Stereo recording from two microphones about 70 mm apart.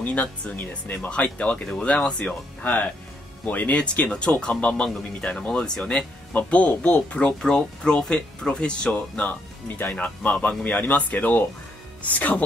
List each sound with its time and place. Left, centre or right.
0.0 s speech: left